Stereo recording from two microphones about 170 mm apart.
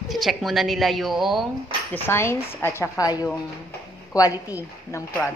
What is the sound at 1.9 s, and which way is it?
A woman's voice, 15° left (ahead or behind).